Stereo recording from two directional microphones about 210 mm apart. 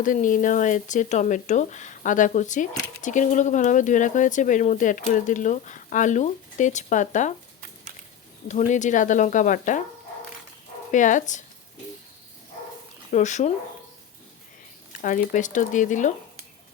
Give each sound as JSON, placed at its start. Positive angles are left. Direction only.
{"t": 0.0, "sound": "speech", "side_deg": 40}
{"t": 8.4, "sound": "speech", "side_deg": 35}
{"t": 10.9, "sound": "speech", "side_deg": 35}
{"t": 13.1, "sound": "speech", "side_deg": 35}
{"t": 15.0, "sound": "speech", "side_deg": 40}